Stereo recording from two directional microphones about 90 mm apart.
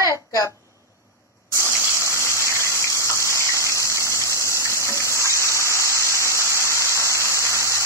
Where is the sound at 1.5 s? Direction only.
25° right (ahead or behind).